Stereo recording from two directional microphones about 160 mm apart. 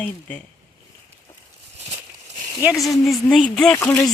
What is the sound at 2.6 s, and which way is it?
Speech, centre (ahead or behind).